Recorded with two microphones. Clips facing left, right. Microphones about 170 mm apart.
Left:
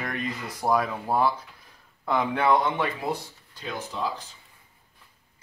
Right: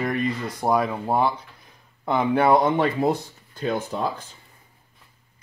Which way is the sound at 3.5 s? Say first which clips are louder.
Right 8 dB; 50° right (ahead or behind).